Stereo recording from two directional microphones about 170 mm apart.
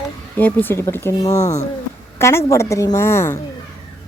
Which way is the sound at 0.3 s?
10° left (ahead or behind).